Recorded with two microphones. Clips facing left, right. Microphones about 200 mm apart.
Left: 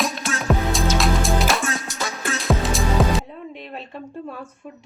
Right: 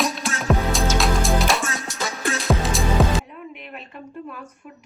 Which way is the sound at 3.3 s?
30° left (ahead or behind).